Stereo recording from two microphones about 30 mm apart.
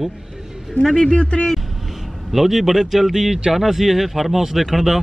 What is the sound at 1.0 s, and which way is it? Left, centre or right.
Speech, left.